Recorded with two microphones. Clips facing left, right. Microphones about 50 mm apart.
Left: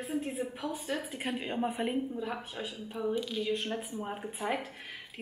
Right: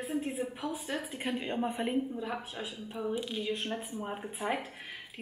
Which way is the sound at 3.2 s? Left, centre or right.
Centre.